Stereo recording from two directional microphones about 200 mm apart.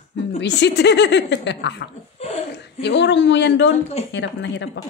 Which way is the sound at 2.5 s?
60° left (ahead or behind).